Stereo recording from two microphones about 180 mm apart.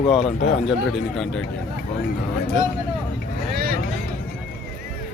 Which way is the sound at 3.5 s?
60° right (ahead or behind).